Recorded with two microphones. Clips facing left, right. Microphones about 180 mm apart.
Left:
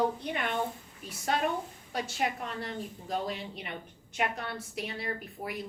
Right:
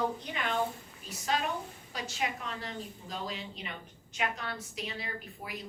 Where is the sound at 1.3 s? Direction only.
55° left (ahead or behind).